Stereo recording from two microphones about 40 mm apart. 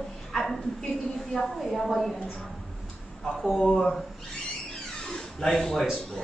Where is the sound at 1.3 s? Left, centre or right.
Centre.